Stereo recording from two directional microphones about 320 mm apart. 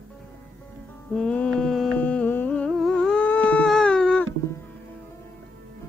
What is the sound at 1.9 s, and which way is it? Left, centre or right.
Humming, centre.